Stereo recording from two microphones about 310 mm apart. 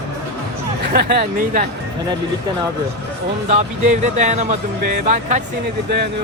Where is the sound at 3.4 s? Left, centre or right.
Right.